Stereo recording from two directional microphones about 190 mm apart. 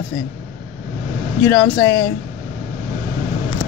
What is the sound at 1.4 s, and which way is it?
Speech, 15° left (ahead or behind).